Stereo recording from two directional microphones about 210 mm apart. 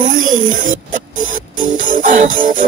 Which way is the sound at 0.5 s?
40° right (ahead or behind).